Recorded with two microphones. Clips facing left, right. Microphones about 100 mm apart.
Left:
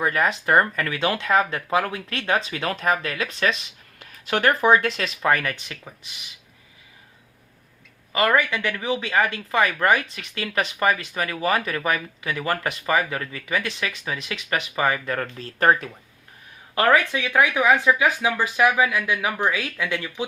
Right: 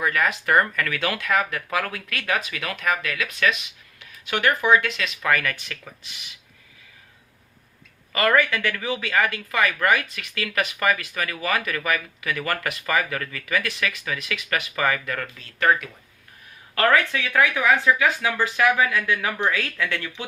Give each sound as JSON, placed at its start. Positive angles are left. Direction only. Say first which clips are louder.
{"t": 0.0, "sound": "speech", "louder": "left 1 dB", "side_deg": 30}
{"t": 8.1, "sound": "speech", "louder": "even", "side_deg": 20}
{"t": 16.7, "sound": "speech", "louder": "left 1 dB", "side_deg": 20}